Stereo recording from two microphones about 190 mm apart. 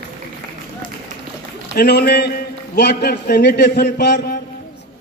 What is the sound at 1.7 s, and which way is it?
A man's voice, 55° left (ahead or behind).